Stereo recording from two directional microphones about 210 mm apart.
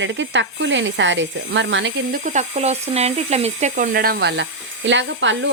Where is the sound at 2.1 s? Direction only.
35° right (ahead or behind).